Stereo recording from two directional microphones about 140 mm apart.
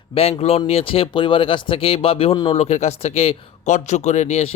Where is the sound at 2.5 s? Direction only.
50° left (ahead or behind).